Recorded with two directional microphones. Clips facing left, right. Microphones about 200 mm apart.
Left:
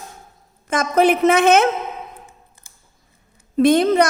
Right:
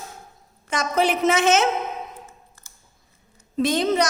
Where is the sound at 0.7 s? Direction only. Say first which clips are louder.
Left 6 dB; 55° left (ahead or behind).